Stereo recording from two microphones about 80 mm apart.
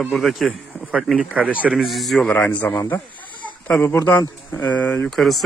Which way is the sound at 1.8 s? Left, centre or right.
Centre.